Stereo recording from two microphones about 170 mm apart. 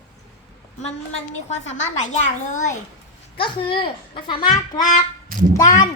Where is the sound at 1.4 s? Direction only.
40° left (ahead or behind).